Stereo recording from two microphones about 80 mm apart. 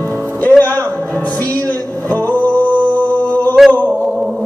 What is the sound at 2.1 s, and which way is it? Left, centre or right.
Music, centre.